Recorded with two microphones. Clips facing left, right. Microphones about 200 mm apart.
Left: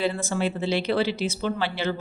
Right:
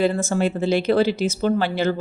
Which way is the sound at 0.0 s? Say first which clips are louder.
Right 5 dB; 45° right (ahead or behind).